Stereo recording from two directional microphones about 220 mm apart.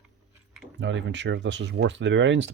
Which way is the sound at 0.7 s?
55° right (ahead or behind).